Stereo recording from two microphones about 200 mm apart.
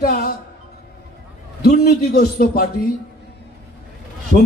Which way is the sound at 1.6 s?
50° left (ahead or behind).